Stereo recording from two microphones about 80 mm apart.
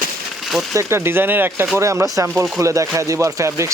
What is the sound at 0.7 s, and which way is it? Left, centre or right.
Speech, right.